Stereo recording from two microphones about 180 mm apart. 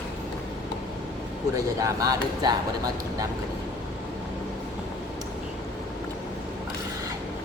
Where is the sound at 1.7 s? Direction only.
20° right (ahead or behind).